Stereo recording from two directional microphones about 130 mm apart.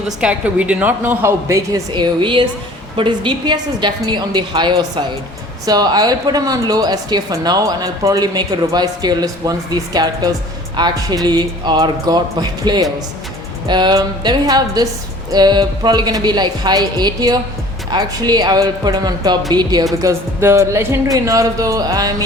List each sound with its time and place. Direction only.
0.2 s a woman's voice: 10° right (ahead or behind)
1.9 s speech: 40° right (ahead or behind)